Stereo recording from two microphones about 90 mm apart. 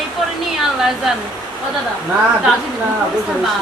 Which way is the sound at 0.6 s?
5° right (ahead or behind).